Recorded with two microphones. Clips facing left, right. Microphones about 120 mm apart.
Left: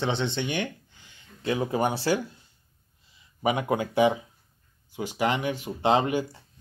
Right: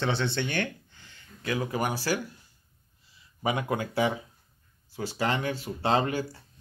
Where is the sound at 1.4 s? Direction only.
25° left (ahead or behind).